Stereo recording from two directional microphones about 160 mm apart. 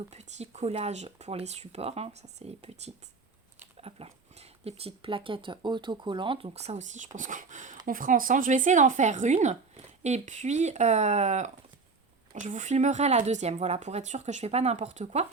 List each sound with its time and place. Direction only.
0.1 s speech: 45° right (ahead or behind)